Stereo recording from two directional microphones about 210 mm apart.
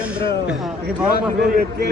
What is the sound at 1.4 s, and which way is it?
Speech, 50° right (ahead or behind).